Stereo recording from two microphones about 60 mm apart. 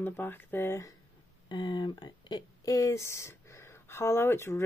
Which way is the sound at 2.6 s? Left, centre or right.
Left.